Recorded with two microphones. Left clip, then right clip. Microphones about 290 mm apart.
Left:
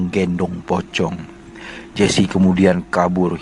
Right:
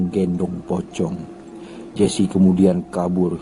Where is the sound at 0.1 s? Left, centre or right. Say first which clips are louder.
Left 5 dB; left.